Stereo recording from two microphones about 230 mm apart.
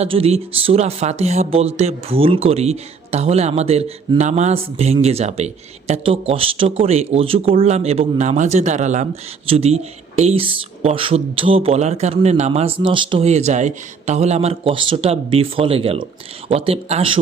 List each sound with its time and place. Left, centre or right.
0.0 s speech: right